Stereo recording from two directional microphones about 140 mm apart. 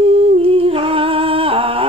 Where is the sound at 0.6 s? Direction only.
40° right (ahead or behind).